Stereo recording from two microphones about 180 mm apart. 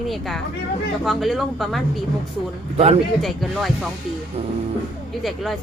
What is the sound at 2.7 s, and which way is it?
Speech, 35° right (ahead or behind).